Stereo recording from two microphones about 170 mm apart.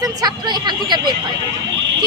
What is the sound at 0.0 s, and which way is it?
Speech, 25° right (ahead or behind).